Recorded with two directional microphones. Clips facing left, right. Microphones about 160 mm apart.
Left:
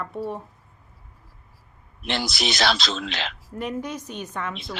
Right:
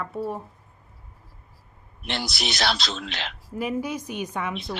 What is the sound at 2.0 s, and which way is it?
A man's voice, 90° left.